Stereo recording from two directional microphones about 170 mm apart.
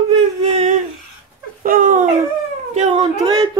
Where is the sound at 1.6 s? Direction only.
55° right (ahead or behind).